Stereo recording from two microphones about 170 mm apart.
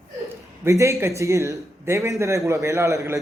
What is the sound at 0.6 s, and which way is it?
A man's voice, 15° right (ahead or behind).